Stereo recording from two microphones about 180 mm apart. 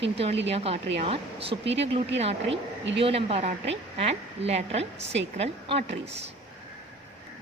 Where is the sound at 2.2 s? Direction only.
35° right (ahead or behind).